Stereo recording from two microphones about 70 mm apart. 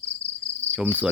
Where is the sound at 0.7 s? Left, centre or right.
Centre.